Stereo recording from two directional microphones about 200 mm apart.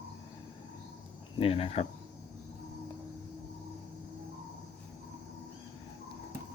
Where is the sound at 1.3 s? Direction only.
30° left (ahead or behind).